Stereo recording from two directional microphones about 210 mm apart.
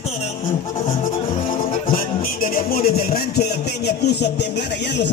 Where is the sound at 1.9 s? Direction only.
45° left (ahead or behind).